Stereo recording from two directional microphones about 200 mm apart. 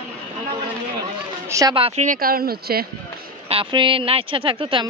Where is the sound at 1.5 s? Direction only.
20° right (ahead or behind); by 2.9 s 50° right (ahead or behind).